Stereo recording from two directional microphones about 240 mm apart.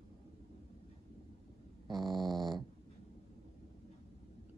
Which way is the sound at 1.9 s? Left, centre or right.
Centre.